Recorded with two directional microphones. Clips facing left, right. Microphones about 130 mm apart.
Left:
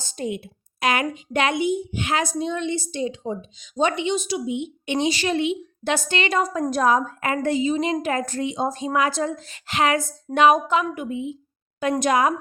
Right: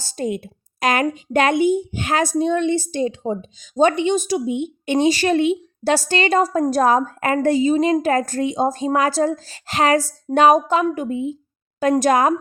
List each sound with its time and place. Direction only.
0.2 s a woman's voice: 45° right (ahead or behind)